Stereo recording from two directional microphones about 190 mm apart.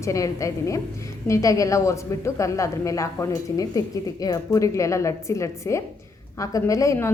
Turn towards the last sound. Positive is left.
turn(degrees=15)  # may be behind; listen again after turning